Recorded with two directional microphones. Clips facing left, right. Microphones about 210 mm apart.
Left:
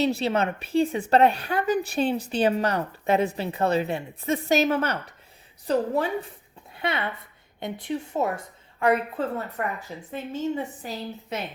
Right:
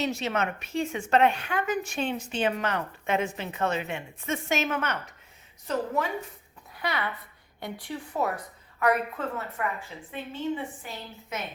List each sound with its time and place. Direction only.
0.0 s a woman's voice: 35° left (ahead or behind)
9.6 s a woman's voice: 40° left (ahead or behind)